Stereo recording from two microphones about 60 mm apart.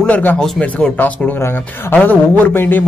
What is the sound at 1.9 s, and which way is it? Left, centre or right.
Speech, left.